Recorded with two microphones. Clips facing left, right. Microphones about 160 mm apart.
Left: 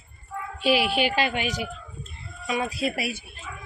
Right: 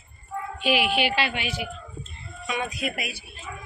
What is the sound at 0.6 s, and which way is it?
Speech, 35° left (ahead or behind).